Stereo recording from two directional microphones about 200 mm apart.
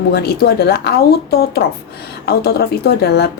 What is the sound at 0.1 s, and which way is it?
A woman's voice, 55° left (ahead or behind).